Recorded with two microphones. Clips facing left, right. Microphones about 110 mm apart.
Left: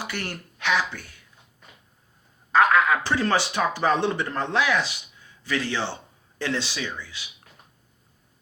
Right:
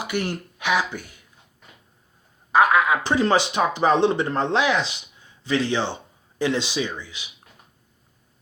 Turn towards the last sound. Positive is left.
turn(degrees=-20)  # may be behind; listen again after turning